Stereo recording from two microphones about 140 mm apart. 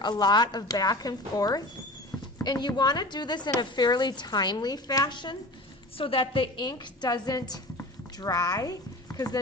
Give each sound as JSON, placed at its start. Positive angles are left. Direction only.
{"t": 0.0, "sound": "a woman's voice", "side_deg": 30}